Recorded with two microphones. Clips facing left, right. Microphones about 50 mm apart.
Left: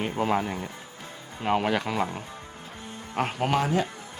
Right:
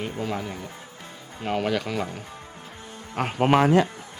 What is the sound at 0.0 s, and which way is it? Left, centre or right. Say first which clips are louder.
Speech: left 4 dB; left.